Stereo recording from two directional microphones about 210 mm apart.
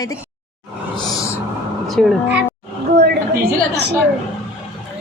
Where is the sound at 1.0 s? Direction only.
20° left (ahead or behind).